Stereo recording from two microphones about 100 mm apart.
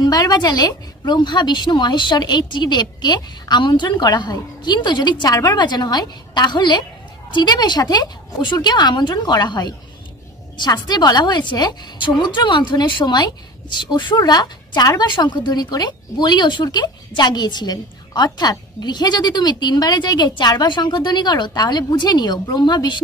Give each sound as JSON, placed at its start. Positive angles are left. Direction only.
{"t": 0.0, "sound": "a woman's voice", "side_deg": 40}